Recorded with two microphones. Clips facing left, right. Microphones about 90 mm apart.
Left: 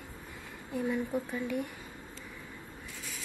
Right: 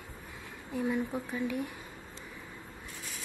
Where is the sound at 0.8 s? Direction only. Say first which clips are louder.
Even; 10° right (ahead or behind).